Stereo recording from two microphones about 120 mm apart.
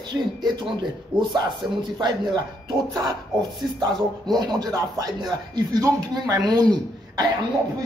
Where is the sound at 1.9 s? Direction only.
35° right (ahead or behind).